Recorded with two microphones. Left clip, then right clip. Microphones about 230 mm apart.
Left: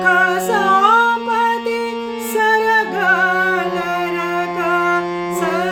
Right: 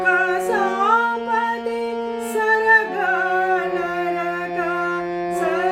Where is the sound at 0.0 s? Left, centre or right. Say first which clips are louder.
Left 4 dB; left.